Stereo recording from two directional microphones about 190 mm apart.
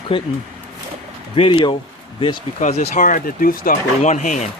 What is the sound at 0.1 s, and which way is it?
Speech, 25° left (ahead or behind).